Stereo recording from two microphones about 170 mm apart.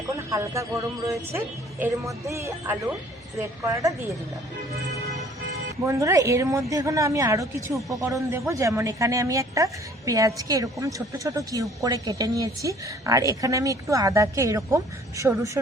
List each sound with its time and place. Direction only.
0.3 s speech: 15° right (ahead or behind)
1.8 s speech: 15° right (ahead or behind)
5.8 s a woman's voice: 15° right (ahead or behind)